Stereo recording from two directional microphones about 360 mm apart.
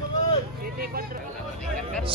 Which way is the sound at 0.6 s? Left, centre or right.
Right.